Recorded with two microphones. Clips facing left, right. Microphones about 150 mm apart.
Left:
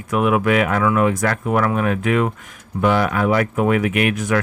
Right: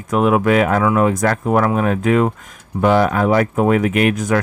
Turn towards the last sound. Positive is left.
turn(degrees=-40)  # may be behind; listen again after turning